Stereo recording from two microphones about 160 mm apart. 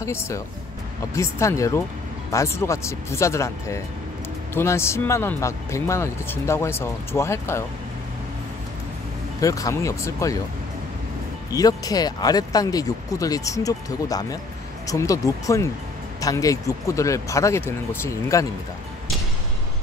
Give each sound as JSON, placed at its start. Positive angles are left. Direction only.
{"t": 0.0, "sound": "speech", "side_deg": 15}
{"t": 9.4, "sound": "speech", "side_deg": 20}
{"t": 11.5, "sound": "speech", "side_deg": 20}